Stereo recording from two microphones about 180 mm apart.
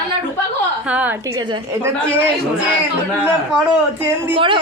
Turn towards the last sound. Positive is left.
turn(degrees=-30)  # may be behind; listen again after turning